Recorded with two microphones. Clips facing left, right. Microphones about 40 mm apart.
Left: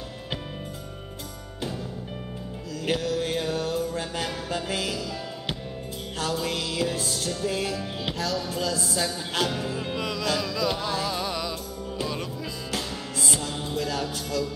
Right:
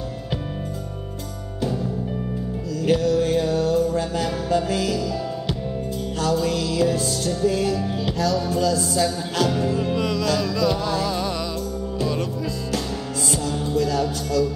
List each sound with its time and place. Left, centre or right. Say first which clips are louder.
2.8 s music: right 7 dB; left
6.1 s music: right 6 dB; left
13.3 s music: right 7 dB; left